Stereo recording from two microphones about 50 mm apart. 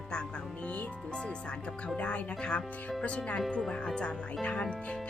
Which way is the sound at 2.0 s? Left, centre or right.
Left.